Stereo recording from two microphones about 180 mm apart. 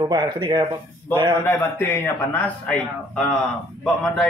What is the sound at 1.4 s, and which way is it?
A man's voice, 15° left (ahead or behind).